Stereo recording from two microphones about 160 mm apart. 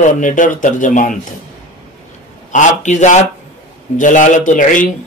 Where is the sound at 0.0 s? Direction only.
55° left (ahead or behind).